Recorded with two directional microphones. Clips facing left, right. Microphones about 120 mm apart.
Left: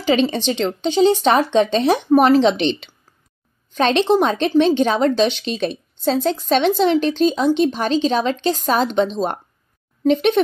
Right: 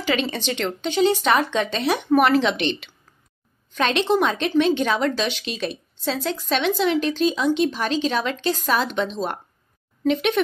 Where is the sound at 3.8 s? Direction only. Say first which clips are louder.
Left 4 dB; 30° left (ahead or behind).